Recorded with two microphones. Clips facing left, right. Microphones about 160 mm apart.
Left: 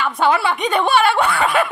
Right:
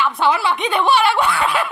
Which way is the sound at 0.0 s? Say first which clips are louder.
Left 1 dB; 50° left (ahead or behind).